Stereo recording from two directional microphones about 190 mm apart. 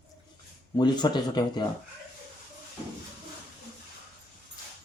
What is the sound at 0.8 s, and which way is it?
Speech, 25° left (ahead or behind).